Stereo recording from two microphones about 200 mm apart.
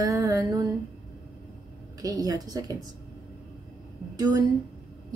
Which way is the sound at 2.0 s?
15° right (ahead or behind).